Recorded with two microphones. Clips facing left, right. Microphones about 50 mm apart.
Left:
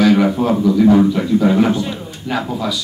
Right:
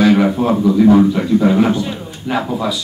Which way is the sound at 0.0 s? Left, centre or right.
Centre.